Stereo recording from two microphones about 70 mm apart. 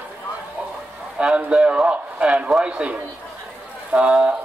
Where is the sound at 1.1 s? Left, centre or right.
Centre.